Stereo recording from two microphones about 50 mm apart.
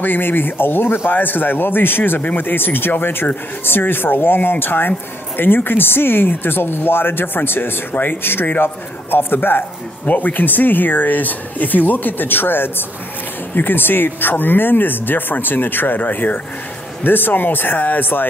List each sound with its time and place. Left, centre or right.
0.0 s speech: left
10.0 s speech: left